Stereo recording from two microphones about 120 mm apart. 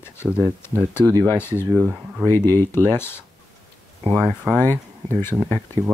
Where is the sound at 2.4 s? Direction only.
30° right (ahead or behind).